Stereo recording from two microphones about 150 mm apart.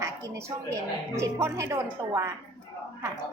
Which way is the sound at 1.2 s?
20° right (ahead or behind).